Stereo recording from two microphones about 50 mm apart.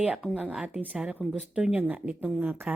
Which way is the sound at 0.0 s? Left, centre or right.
Right.